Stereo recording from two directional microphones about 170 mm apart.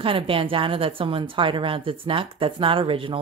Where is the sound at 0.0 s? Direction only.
30° right (ahead or behind).